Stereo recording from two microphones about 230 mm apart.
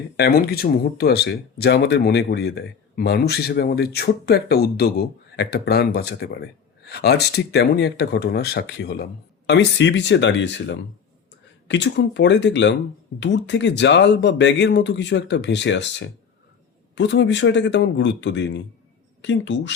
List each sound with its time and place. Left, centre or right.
0.2 s speech: left